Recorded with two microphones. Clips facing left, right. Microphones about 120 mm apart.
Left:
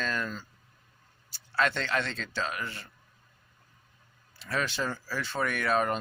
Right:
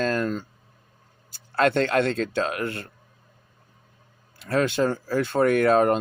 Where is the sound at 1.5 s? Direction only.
50° right (ahead or behind).